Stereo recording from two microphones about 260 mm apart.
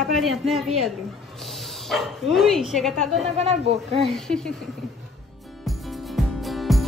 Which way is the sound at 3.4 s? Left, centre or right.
Right.